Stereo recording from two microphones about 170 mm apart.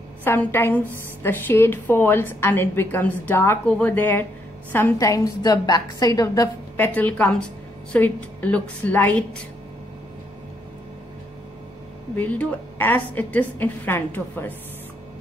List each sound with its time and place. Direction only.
0.2 s a woman's voice: 10° left (ahead or behind)
12.2 s a woman's voice: 10° left (ahead or behind)